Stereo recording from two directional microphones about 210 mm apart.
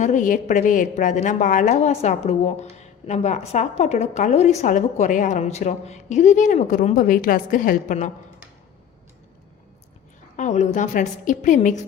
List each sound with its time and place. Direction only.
0.0 s a woman's voice: 35° left (ahead or behind)
10.3 s a woman's voice: 35° left (ahead or behind)